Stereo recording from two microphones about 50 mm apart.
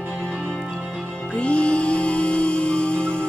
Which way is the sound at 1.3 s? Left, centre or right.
Left.